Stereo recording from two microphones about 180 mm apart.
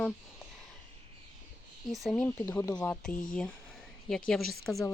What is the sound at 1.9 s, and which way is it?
Speech, centre (ahead or behind).